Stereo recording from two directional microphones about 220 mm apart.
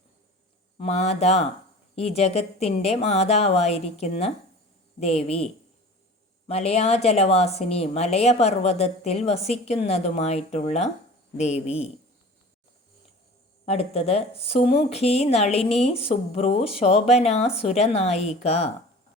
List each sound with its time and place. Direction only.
0.8 s a woman's voice: 30° left (ahead or behind)
6.5 s a woman's voice: 30° left (ahead or behind)
13.7 s a woman's voice: 30° left (ahead or behind)